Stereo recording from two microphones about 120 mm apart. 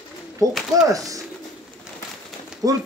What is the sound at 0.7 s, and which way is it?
Speech, 30° right (ahead or behind).